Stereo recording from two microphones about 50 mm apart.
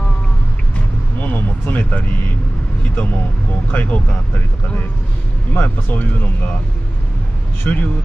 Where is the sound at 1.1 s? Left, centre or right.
Left.